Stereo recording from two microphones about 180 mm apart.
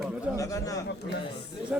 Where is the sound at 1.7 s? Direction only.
5° right (ahead or behind).